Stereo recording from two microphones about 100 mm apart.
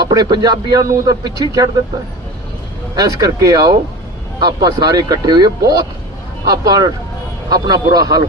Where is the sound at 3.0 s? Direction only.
35° right (ahead or behind).